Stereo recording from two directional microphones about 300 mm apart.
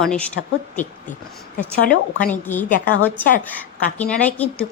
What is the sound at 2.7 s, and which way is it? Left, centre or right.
Speech, left.